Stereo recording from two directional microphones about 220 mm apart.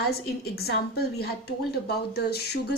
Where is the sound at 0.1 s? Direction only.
45° left (ahead or behind).